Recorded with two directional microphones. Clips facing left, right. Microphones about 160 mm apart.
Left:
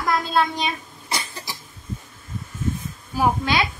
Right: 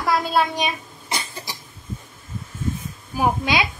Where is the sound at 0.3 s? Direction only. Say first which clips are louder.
Right 1 dB; 15° right (ahead or behind).